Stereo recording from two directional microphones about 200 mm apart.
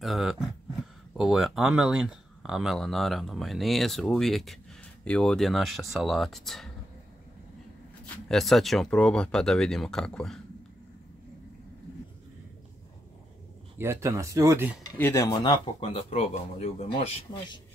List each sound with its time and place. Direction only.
0.0 s a sound: centre (ahead or behind)
1.1 s speech: centre (ahead or behind)
8.3 s speech: centre (ahead or behind)
13.7 s speech: 15° right (ahead or behind)
15.0 s speech: 10° left (ahead or behind)